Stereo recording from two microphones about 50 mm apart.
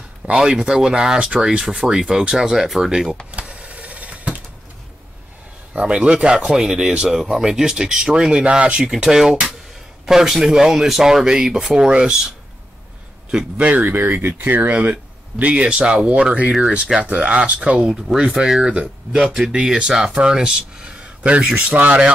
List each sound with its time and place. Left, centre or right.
0.4 s speech: centre
3.3 s power windows: right
5.7 s speech: right
13.3 s speech: right
13.9 s speech: right
17.8 s speech: centre; by 22.1 s right